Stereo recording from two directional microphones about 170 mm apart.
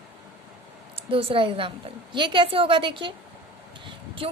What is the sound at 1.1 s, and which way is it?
A woman's voice, 30° right (ahead or behind).